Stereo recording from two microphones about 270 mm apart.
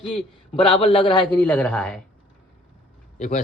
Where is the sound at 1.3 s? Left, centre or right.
Centre.